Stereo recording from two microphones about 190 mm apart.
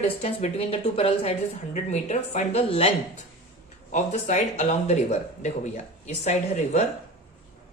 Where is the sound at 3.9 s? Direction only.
40° left (ahead or behind).